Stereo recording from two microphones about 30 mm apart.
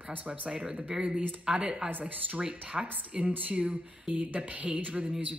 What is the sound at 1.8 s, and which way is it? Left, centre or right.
Speech, right.